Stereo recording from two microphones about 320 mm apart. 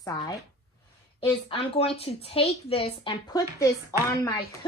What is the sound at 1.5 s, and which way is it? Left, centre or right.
A woman's voice, centre.